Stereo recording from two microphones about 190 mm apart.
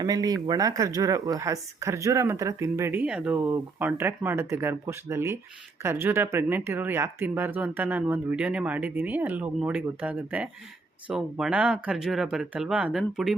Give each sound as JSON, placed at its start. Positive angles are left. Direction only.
{"t": 0.0, "sound": "speech", "side_deg": -20}